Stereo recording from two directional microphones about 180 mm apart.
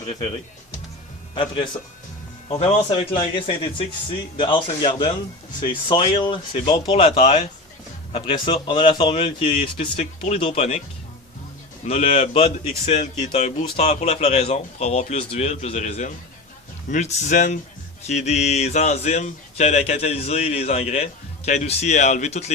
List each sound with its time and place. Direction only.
1.7 s speech: 10° left (ahead or behind)
2.5 s a man's voice: 35° left (ahead or behind)
8.1 s a man's voice: 30° left (ahead or behind)
11.9 s a man's voice: 35° left (ahead or behind)